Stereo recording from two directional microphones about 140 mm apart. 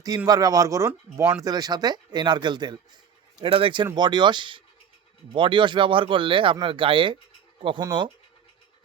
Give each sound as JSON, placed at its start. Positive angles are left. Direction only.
{"t": 0.3, "sound": "speech", "side_deg": -25}